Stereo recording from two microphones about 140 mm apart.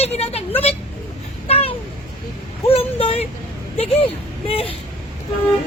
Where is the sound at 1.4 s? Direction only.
45° left (ahead or behind).